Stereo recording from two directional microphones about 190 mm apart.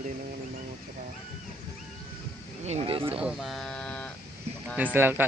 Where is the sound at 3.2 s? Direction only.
5° right (ahead or behind).